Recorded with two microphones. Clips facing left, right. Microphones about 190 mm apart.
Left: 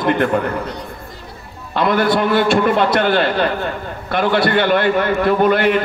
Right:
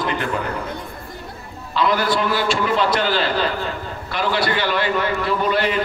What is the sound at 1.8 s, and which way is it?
A man's voice, 55° left (ahead or behind).